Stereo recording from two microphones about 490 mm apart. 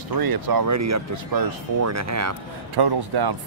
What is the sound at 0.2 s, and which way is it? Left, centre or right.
Speech, right.